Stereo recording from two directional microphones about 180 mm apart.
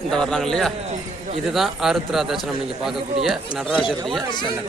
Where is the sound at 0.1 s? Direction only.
5° left (ahead or behind).